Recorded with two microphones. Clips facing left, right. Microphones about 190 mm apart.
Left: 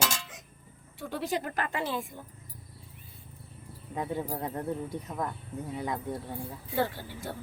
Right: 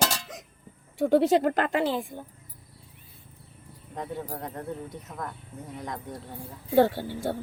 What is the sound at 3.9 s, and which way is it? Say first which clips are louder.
Speech: left 2 dB; 5° left (ahead or behind).